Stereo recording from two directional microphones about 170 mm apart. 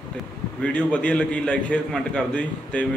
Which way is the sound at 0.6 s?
5° left (ahead or behind).